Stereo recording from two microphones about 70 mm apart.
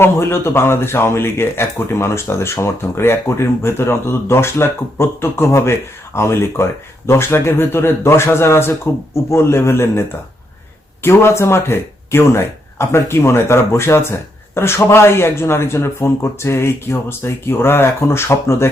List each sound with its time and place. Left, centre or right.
0.0 s speech: left